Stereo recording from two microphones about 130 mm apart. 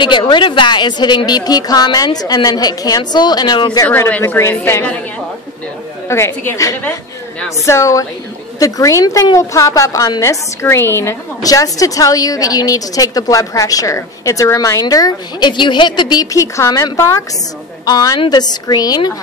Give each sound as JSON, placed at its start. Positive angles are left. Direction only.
{"t": 0.0, "sound": "a woman's voice", "side_deg": 35}
{"t": 3.8, "sound": "a woman's voice", "side_deg": 20}
{"t": 6.0, "sound": "a woman's voice", "side_deg": 20}